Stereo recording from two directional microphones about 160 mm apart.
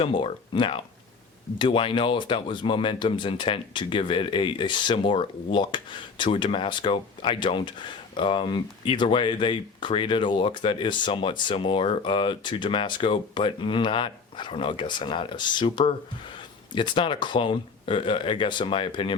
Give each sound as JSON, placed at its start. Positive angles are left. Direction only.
{"t": 0.0, "sound": "speech", "side_deg": 30}